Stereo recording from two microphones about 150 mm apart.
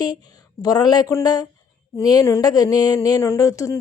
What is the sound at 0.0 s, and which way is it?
Speech, 25° left (ahead or behind).